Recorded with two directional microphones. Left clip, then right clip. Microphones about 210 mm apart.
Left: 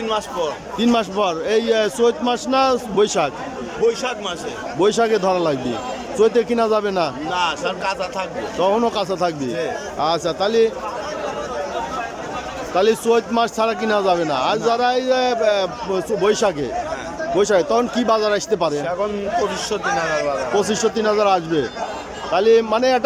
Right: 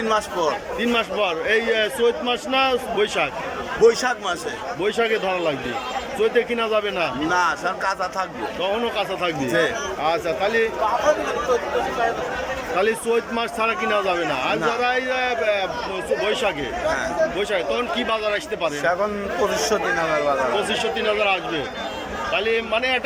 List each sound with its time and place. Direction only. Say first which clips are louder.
0.8 s speech: left 5 dB; 20° left (ahead or behind)
3.8 s a man's voice: right 3 dB; centre (ahead or behind)
4.8 s speech: left 5 dB; 20° left (ahead or behind)
8.6 s speech: left 5 dB; 20° left (ahead or behind)
12.7 s speech: left 5 dB; 15° left (ahead or behind)
20.6 s speech: left 3 dB; 25° left (ahead or behind)